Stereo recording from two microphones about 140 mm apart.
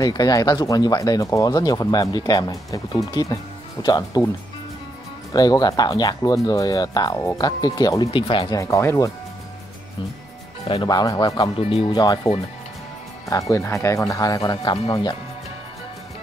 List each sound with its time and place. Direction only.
0.0 s speech: 25° left (ahead or behind)
5.3 s speech: 30° left (ahead or behind)
8.5 s speech: 20° left (ahead or behind)
10.7 s speech: 30° left (ahead or behind)
13.3 s speech: 25° left (ahead or behind)